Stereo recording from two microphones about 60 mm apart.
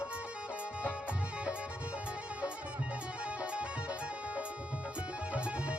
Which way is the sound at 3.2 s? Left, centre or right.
Centre.